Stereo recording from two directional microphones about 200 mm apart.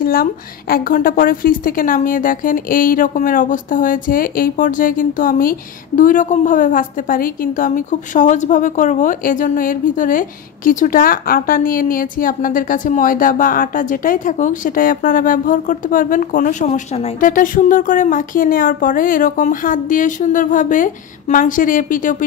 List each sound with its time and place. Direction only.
0.0 s a woman's voice: 45° left (ahead or behind)